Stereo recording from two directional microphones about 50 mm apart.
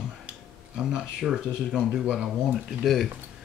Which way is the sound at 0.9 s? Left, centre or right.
Centre.